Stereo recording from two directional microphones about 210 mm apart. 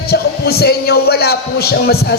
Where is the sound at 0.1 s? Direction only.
50° left (ahead or behind).